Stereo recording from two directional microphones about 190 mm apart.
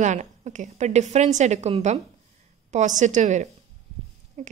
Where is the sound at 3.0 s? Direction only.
40° right (ahead or behind).